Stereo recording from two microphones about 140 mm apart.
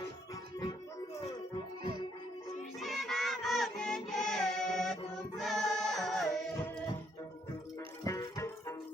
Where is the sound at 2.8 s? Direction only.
Centre (ahead or behind).